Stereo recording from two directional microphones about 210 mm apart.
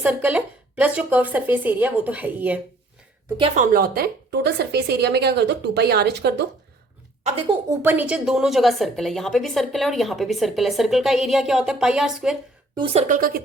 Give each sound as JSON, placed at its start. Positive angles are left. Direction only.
{"t": 0.0, "sound": "a woman's voice", "side_deg": -5}
{"t": 3.3, "sound": "speech", "side_deg": -25}
{"t": 3.6, "sound": "a woman's voice", "side_deg": -45}
{"t": 7.9, "sound": "a woman's voice", "side_deg": -5}
{"t": 12.7, "sound": "a woman's voice", "side_deg": -25}